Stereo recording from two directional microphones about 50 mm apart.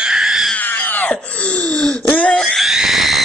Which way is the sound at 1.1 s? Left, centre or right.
Left.